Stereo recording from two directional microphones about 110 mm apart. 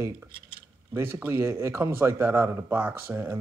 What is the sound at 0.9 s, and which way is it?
A man's voice, 20° right (ahead or behind).